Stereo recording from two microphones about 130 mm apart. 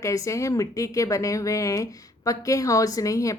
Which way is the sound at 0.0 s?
25° left (ahead or behind).